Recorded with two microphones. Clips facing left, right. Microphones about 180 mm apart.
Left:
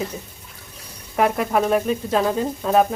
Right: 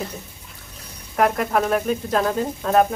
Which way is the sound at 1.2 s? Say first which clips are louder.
Even; 5° left (ahead or behind).